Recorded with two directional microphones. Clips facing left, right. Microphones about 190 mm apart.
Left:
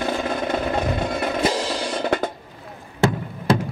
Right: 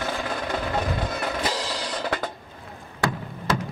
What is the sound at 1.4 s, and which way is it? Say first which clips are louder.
Music: left 6 dB; 25° left (ahead or behind).